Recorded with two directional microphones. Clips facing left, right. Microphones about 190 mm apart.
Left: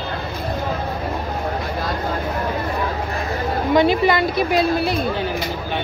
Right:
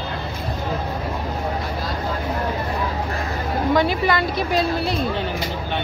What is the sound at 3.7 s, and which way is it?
A woman's voice, 20° left (ahead or behind).